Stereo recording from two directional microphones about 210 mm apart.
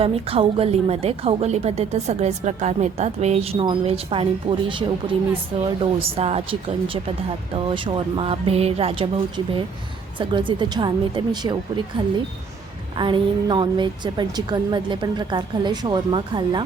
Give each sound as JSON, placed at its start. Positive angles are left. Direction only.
{"t": 0.0, "sound": "a woman's voice", "side_deg": -25}
{"t": 13.0, "sound": "a woman's voice", "side_deg": -20}